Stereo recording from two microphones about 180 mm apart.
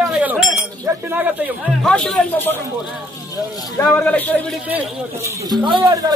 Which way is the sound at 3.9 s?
10° left (ahead or behind).